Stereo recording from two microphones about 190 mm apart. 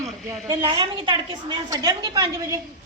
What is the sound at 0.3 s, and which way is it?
A woman's voice, 20° right (ahead or behind).